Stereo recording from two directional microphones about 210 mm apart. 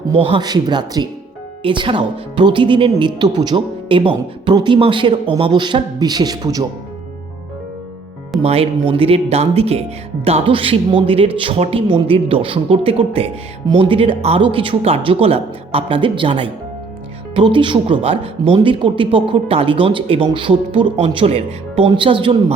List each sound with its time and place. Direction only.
0.2 s speech: 25° right (ahead or behind)
8.4 s speech: 30° right (ahead or behind)